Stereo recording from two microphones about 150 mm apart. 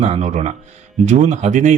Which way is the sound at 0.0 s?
45° right (ahead or behind).